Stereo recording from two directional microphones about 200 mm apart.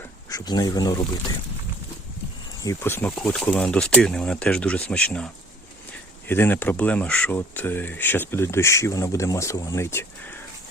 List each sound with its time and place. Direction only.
0.3 s speech: 20° left (ahead or behind)
2.6 s speech: 10° left (ahead or behind)